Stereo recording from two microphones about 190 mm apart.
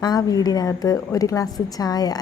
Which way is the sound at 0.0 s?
20° left (ahead or behind).